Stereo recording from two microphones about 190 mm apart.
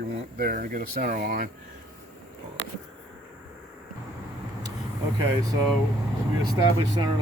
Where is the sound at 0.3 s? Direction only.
50° right (ahead or behind).